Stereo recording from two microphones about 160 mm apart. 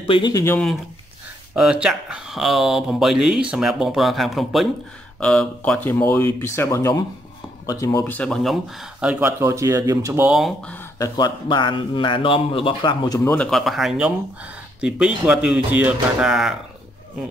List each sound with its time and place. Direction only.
0.0 s a man's voice: 30° left (ahead or behind)
1.5 s a man's voice: 5° right (ahead or behind); by 8.0 s 20° left (ahead or behind)
8.0 s speech: 10° left (ahead or behind); by 10.2 s 20° right (ahead or behind)
10.2 s speech: 5° right (ahead or behind)
10.6 s speech: 10° left (ahead or behind)
11.0 s a man's voice: 25° left (ahead or behind)
13.2 s speech: 10° left (ahead or behind)
13.5 s speech: centre (ahead or behind)